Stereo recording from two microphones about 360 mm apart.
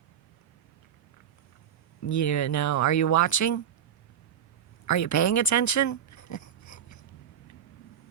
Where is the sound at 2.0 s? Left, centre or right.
Left.